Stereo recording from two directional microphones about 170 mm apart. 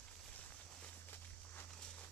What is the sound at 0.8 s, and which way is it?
Walk, 10° left (ahead or behind).